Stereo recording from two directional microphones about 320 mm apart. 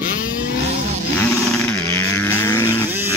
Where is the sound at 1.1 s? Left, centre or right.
Centre.